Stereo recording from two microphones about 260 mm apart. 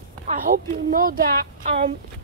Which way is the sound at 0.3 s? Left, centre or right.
Right.